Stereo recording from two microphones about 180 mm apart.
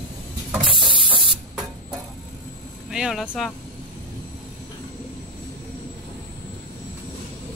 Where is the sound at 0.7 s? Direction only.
30° right (ahead or behind).